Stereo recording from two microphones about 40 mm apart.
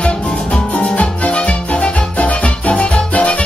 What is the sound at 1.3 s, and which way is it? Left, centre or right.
Music, left.